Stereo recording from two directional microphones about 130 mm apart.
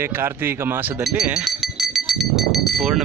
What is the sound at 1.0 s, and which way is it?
Goat, 5° right (ahead or behind).